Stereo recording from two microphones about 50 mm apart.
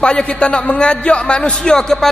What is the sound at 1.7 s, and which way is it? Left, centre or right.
Speech, centre.